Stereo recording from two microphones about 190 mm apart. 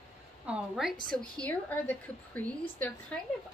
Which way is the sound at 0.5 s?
Centre (ahead or behind).